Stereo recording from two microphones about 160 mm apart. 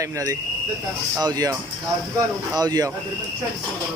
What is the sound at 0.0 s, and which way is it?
Speech, 20° right (ahead or behind).